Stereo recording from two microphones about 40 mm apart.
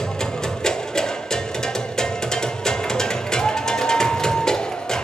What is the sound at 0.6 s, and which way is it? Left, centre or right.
Music, centre.